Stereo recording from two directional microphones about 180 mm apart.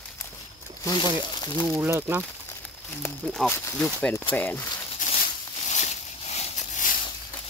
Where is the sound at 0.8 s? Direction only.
25° left (ahead or behind).